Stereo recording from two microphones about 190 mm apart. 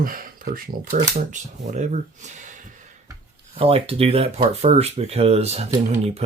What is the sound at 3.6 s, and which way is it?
Speech, 30° right (ahead or behind).